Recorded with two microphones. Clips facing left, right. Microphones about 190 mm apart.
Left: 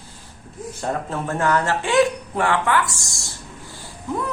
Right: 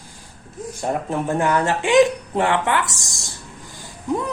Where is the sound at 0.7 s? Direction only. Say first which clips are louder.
Right 3 dB; 15° right (ahead or behind).